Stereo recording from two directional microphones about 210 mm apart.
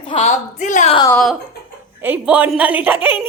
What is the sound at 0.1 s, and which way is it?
Speech, 35° left (ahead or behind).